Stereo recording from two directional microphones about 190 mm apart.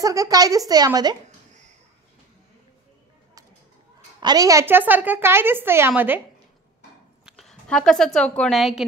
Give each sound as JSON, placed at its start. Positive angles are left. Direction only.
{"t": 0.0, "sound": "a woman's voice", "side_deg": -15}
{"t": 4.2, "sound": "a woman's voice", "side_deg": -20}
{"t": 7.2, "sound": "a woman's voice", "side_deg": 0}